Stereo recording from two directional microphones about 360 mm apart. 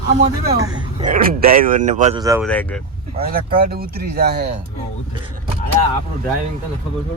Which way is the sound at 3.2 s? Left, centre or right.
Right.